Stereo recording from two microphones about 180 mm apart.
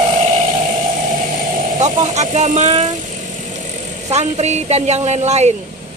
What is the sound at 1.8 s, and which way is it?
Speech, 40° right (ahead or behind).